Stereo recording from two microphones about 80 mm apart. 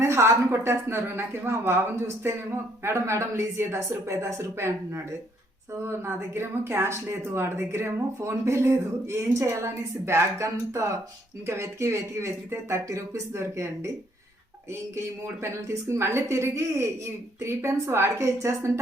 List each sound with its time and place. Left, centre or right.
0.0 s speech: right